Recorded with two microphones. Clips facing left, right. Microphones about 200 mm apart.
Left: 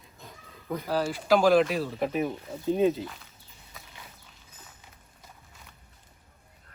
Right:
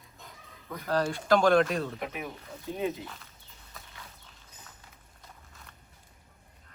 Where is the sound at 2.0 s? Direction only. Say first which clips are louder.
Left 9 dB; 30° left (ahead or behind).